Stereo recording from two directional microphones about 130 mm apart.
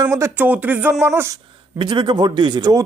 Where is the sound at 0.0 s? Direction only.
25° right (ahead or behind).